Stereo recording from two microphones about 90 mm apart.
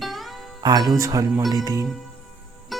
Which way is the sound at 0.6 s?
45° right (ahead or behind).